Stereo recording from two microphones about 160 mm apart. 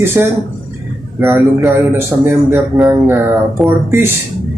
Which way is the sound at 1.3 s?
Centre (ahead or behind).